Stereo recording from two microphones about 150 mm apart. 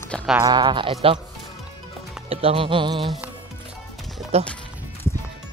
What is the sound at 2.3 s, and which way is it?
Speech, 40° right (ahead or behind).